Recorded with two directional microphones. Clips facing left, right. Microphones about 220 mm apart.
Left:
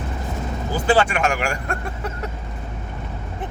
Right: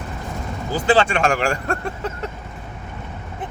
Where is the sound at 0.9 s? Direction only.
30° right (ahead or behind).